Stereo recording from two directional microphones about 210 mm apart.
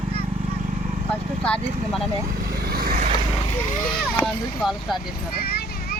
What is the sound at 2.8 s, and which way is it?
Vehicle, 45° right (ahead or behind).